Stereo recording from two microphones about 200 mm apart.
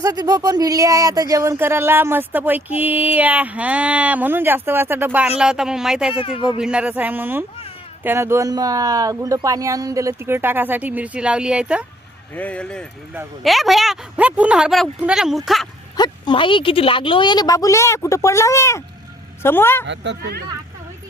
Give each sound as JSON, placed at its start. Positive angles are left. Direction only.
{"t": 0.0, "sound": "a woman's voice", "side_deg": -20}
{"t": 6.1, "sound": "speech", "side_deg": 25}
{"t": 6.6, "sound": "speech", "side_deg": -5}
{"t": 12.3, "sound": "a woman's voice", "side_deg": 5}
{"t": 16.0, "sound": "speech", "side_deg": 25}
{"t": 19.9, "sound": "speech", "side_deg": -60}